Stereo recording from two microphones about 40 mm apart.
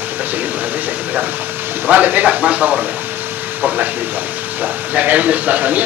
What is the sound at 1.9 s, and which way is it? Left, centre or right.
Speech, right.